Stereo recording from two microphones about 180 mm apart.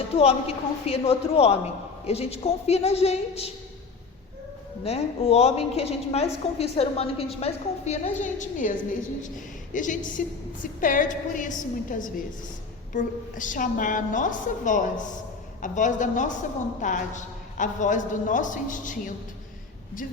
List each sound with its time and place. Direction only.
0.2 s a woman's voice: 35° left (ahead or behind)
4.8 s a woman's voice: 35° left (ahead or behind)
9.7 s a woman's voice: 45° left (ahead or behind)